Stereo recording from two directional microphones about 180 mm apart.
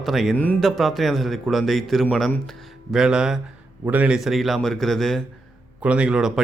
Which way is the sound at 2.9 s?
5° right (ahead or behind).